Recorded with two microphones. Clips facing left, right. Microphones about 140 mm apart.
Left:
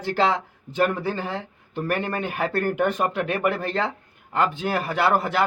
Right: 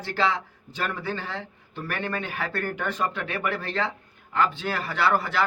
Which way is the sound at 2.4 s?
50° left (ahead or behind).